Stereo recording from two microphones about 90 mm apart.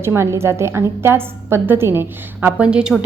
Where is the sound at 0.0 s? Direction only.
30° right (ahead or behind).